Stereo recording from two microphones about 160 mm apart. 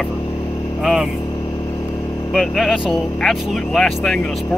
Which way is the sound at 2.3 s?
5° right (ahead or behind).